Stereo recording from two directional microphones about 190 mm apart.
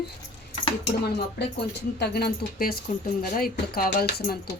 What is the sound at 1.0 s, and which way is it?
Speech, 60° left (ahead or behind).